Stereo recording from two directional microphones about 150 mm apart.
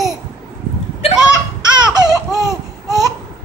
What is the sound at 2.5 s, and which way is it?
Laughter, centre (ahead or behind).